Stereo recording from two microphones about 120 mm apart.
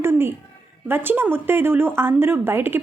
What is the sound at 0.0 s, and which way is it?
A woman's voice, 20° right (ahead or behind).